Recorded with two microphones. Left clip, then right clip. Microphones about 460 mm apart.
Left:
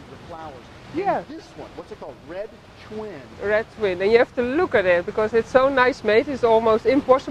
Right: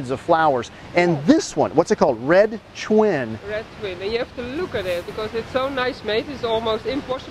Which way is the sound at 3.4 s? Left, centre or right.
Left.